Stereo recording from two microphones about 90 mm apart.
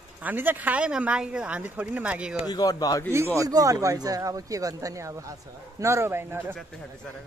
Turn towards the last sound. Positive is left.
turn(degrees=-25)  # may be behind; listen again after turning